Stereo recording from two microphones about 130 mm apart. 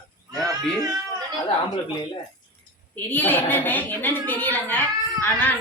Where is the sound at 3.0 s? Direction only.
15° left (ahead or behind).